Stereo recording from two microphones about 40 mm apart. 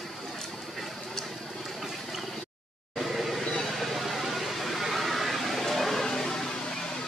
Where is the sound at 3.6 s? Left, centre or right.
Centre.